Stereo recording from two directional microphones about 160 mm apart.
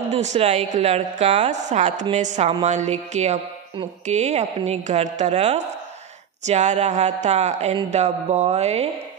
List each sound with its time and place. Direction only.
0.1 s a woman's voice: 45° right (ahead or behind)